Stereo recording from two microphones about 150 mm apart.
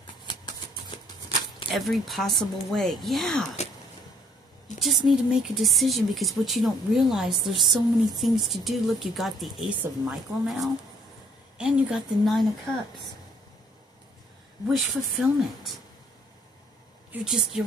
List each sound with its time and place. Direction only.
0.3 s a sound: 30° left (ahead or behind)
1.7 s speech: centre (ahead or behind)
4.7 s speech: centre (ahead or behind)
14.7 s speech: centre (ahead or behind)
17.1 s speech: 5° right (ahead or behind)